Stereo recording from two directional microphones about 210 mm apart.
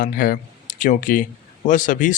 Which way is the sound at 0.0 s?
45° left (ahead or behind).